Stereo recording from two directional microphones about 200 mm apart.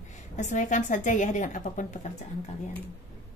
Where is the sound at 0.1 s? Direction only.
35° left (ahead or behind).